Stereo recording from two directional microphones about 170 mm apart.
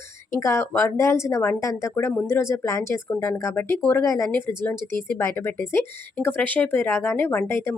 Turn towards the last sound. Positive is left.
turn(degrees=15)  # may be behind; listen again after turning